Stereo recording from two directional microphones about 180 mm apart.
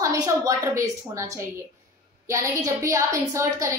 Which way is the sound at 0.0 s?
15° right (ahead or behind).